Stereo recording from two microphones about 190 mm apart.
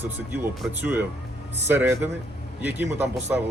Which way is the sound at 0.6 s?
10° right (ahead or behind).